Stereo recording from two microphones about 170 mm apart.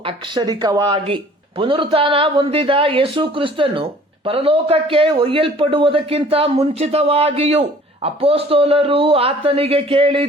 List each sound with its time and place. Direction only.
0.0 s a man's voice: 25° right (ahead or behind)